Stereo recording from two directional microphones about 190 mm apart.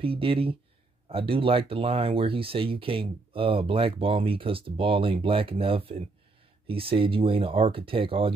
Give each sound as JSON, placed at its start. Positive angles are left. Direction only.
{"t": 0.0, "sound": "speech", "side_deg": -30}